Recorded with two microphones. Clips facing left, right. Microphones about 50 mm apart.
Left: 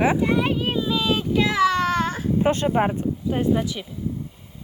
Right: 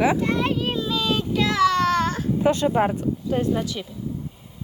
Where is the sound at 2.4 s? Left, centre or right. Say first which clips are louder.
Right 1 dB; left.